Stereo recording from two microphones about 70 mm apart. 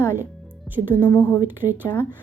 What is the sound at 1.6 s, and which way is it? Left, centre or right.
Speech, left.